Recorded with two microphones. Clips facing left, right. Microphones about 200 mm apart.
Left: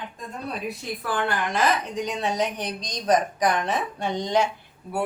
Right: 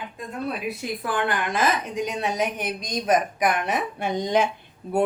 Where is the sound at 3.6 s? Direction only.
15° right (ahead or behind).